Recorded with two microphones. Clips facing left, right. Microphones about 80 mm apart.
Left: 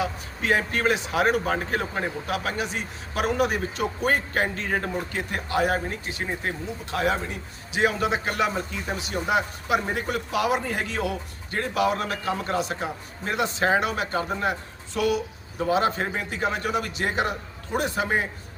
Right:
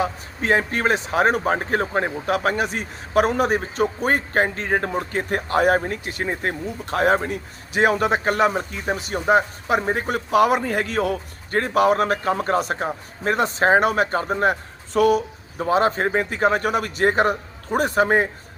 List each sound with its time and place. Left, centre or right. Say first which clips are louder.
0.0 s speech: right 4 dB; right